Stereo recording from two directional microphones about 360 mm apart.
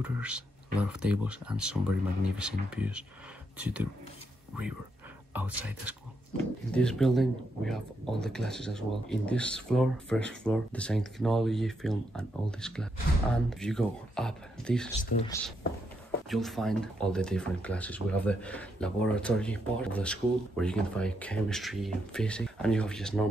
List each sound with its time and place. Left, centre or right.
0.0 s speech: centre
5.3 s speech: centre